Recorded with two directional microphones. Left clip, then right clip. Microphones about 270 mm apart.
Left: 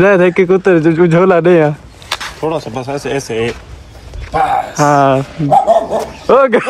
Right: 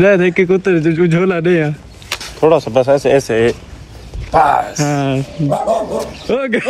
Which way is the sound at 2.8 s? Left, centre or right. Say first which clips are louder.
Right 7 dB; right.